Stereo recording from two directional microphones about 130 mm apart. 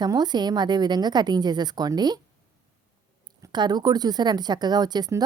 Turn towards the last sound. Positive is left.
turn(degrees=-30)  # may be behind; listen again after turning